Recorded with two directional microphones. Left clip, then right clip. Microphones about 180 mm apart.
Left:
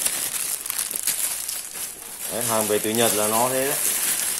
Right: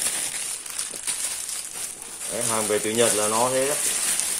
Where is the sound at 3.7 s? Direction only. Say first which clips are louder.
Even; 15° left (ahead or behind).